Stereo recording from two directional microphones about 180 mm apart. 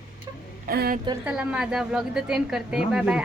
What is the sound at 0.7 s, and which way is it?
Speech, 55° right (ahead or behind).